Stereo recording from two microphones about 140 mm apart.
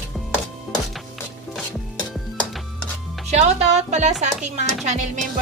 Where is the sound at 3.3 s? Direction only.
55° right (ahead or behind).